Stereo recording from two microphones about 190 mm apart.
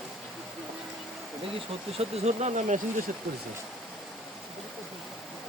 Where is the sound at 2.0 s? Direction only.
35° right (ahead or behind).